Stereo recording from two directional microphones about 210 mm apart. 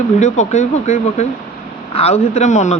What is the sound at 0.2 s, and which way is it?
Speech, 35° left (ahead or behind).